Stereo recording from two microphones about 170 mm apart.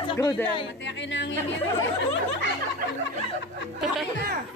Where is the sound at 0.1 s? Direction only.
25° left (ahead or behind).